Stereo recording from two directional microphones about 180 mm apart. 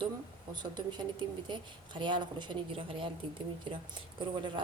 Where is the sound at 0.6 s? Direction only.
25° right (ahead or behind).